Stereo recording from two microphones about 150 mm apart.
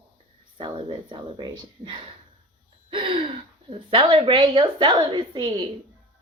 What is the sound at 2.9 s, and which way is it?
Gasp, 35° right (ahead or behind).